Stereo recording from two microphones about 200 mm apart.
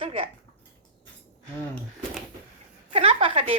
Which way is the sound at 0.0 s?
25° right (ahead or behind).